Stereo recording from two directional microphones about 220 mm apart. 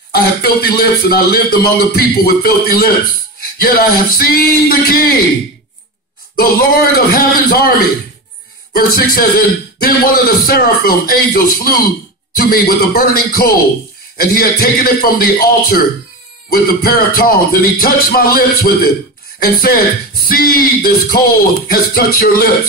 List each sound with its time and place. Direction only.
0.1 s a man's voice: 45° left (ahead or behind)
6.3 s a man's voice: 45° left (ahead or behind)